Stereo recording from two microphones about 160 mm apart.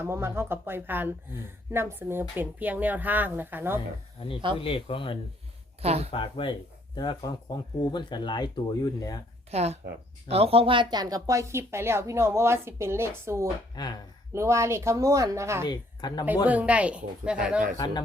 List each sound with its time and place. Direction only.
0.0 s speech: 15° right (ahead or behind)
4.2 s speech: 35° left (ahead or behind)
5.8 s speech: 40° right (ahead or behind)
6.1 s speech: 35° left (ahead or behind)
9.5 s speech: 40° right (ahead or behind); by 13.5 s 15° right (ahead or behind)
13.7 s speech: 25° left (ahead or behind)
14.3 s speech: 20° right (ahead or behind)
15.6 s speech: 25° left (ahead or behind)
16.5 s speech: 10° right (ahead or behind)
17.7 s speech: 25° left (ahead or behind)